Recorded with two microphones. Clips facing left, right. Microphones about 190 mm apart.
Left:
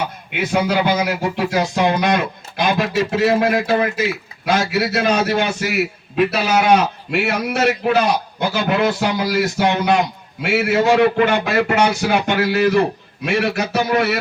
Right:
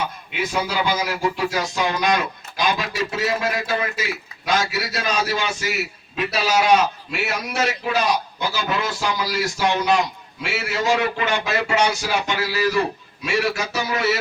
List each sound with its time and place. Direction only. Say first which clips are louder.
0.3 s a man's voice: left 8 dB; 60° left (ahead or behind)